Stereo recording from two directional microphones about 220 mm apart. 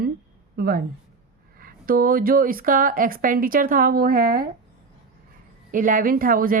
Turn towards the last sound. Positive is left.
turn(degrees=-40)  # may be behind; listen again after turning